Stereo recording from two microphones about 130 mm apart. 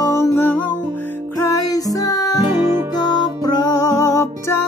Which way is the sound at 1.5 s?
30° left (ahead or behind).